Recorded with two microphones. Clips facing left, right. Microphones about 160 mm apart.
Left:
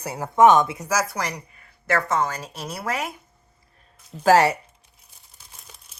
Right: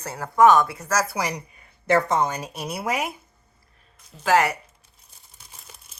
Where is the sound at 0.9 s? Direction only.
5° left (ahead or behind).